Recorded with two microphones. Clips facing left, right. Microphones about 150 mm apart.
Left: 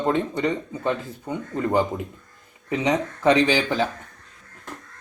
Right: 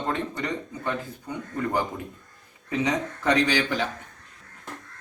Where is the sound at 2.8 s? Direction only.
25° left (ahead or behind).